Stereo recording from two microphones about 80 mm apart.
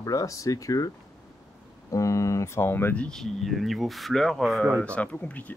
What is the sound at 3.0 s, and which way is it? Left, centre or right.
Speech, centre.